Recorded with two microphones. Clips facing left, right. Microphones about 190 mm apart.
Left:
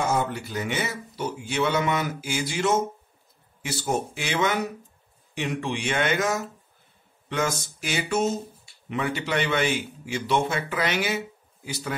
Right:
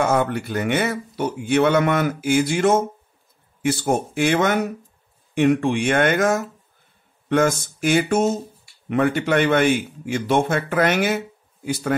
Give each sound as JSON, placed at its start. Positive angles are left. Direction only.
{"t": 0.0, "sound": "a man's voice", "side_deg": -60}
{"t": 7.2, "sound": "a sound", "side_deg": -50}
{"t": 7.8, "sound": "a man's voice", "side_deg": -50}